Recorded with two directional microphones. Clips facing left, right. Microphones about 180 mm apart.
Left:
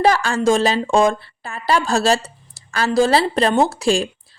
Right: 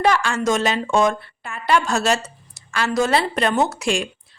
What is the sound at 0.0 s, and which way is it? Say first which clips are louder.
Speech: left 3 dB; 35° left (ahead or behind).